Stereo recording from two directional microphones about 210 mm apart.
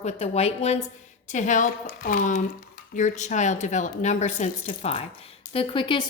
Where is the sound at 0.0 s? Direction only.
30° left (ahead or behind).